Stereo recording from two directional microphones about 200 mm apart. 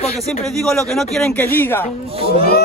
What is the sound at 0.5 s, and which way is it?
A man's voice, centre (ahead or behind).